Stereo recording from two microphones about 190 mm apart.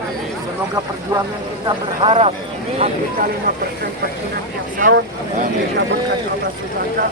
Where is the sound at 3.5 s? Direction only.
50° right (ahead or behind).